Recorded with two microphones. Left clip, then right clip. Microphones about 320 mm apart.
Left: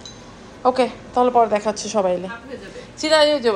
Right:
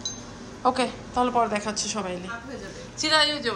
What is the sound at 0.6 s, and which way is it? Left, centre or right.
A woman's voice, centre.